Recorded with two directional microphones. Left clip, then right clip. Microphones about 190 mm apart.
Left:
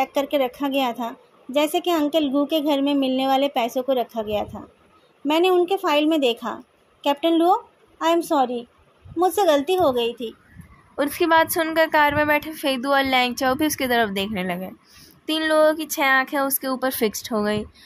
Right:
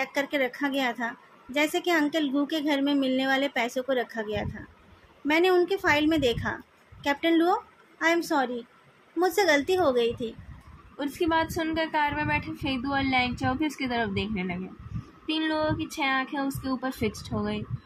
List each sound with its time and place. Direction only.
0.0 s a woman's voice: 25° left (ahead or behind)
11.0 s a woman's voice: 60° left (ahead or behind)